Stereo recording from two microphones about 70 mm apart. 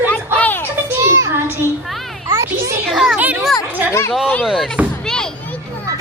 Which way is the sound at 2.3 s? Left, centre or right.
Right.